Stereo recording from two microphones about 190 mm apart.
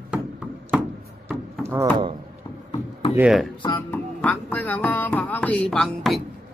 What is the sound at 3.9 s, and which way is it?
Music, 10° left (ahead or behind).